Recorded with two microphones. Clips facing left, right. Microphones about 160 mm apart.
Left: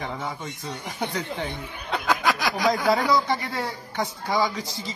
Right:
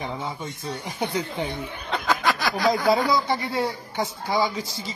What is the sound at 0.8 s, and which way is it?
Speech, 15° right (ahead or behind).